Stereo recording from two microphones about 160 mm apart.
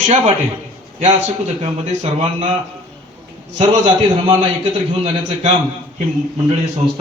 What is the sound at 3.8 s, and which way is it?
A man's voice, 30° right (ahead or behind).